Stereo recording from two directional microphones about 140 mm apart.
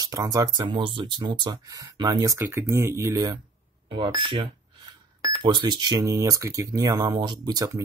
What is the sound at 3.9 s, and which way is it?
Speech, 35° right (ahead or behind).